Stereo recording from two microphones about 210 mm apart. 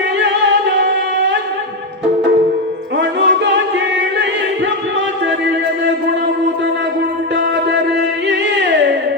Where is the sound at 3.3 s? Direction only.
55° right (ahead or behind).